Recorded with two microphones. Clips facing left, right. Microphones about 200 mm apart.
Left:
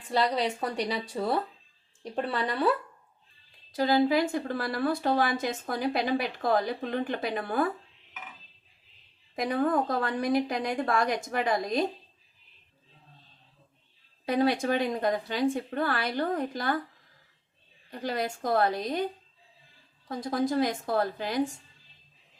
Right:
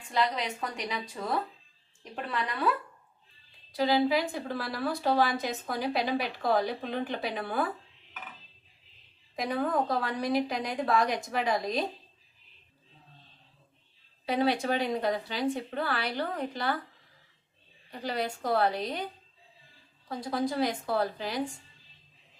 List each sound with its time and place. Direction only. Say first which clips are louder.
0.1 s a woman's voice: left 3 dB; 35° left (ahead or behind)
3.7 s a woman's voice: left 2 dB; 45° left (ahead or behind)
9.3 s a woman's voice: left 3 dB; 50° left (ahead or behind)
14.3 s a woman's voice: left 2 dB; 45° left (ahead or behind)
18.0 s a woman's voice: left 1 dB; 45° left (ahead or behind)
20.1 s a woman's voice: left 2 dB; 45° left (ahead or behind)